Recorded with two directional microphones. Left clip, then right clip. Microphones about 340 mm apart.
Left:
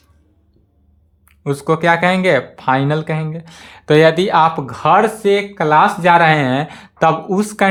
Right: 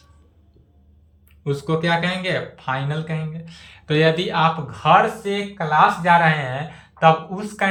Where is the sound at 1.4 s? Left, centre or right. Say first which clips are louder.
Left 7 dB; centre.